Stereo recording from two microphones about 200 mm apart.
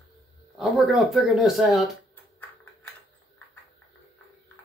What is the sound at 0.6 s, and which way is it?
Speech, centre (ahead or behind).